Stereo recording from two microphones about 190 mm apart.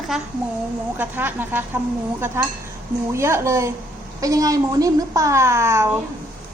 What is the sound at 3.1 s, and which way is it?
A woman's voice, 15° right (ahead or behind).